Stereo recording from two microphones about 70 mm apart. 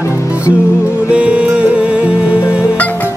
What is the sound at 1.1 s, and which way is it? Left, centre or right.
Music, centre.